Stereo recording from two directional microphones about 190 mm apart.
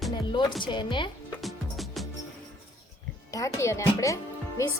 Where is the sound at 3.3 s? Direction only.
15° left (ahead or behind).